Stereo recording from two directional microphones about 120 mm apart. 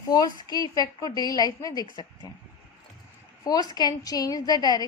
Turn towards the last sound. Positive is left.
turn(degrees=35)  # may be behind; listen again after turning